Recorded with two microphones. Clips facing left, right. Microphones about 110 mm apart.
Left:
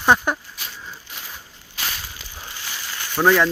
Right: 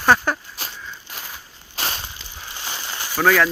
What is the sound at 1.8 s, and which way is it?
Crushing, 35° right (ahead or behind).